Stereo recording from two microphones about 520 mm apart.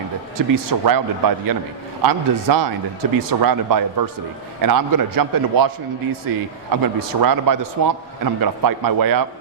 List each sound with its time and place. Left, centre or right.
0.3 s a man's voice: right